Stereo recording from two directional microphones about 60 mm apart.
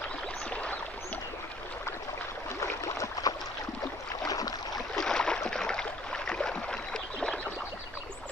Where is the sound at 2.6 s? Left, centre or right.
Left.